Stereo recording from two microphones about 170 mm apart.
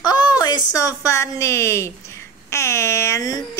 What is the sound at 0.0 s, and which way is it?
A woman's voice, 25° left (ahead or behind).